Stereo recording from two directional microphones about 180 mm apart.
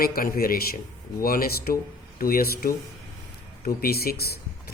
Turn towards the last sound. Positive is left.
turn(degrees=60)  # may be behind; listen again after turning